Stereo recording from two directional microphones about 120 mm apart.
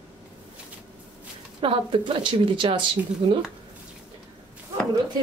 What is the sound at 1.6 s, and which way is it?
Speech, 50° right (ahead or behind).